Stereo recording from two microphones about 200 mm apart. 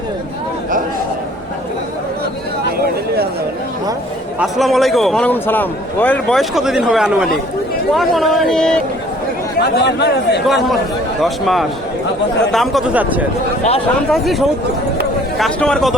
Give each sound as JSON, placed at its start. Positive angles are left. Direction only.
{"t": 4.4, "sound": "a man's voice", "side_deg": 0}
{"t": 9.6, "sound": "speech", "side_deg": 55}
{"t": 10.4, "sound": "a man's voice", "side_deg": 0}